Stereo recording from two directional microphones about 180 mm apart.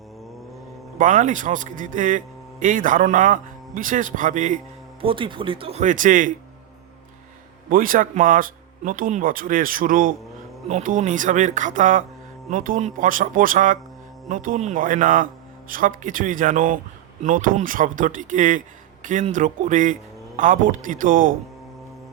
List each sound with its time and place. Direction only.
0.9 s speech: 45° right (ahead or behind)
4.9 s speech: 30° right (ahead or behind); by 6.3 s 45° right (ahead or behind)
7.7 s speech: 50° right (ahead or behind)